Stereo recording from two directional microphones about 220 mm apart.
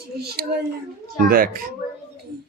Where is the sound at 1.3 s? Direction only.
40° right (ahead or behind).